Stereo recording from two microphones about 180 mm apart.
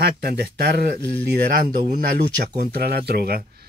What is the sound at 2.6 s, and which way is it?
Speech, 60° right (ahead or behind).